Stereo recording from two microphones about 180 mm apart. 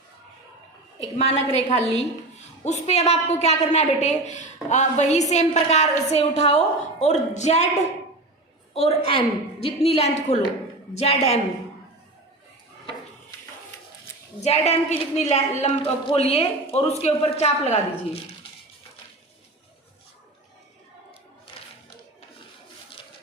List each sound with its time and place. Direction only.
0.9 s a woman's voice: 35° left (ahead or behind)
14.4 s a woman's voice: 35° left (ahead or behind)
21.5 s a sound: 30° left (ahead or behind)